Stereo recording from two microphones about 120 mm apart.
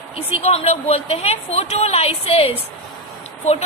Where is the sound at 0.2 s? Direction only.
55° left (ahead or behind).